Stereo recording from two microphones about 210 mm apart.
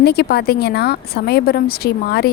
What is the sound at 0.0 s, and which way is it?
A woman's voice, 50° left (ahead or behind).